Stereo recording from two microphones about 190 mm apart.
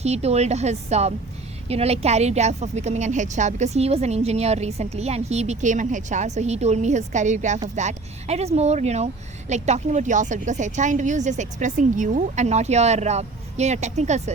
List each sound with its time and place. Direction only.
0.0 s a woman's voice: 35° right (ahead or behind)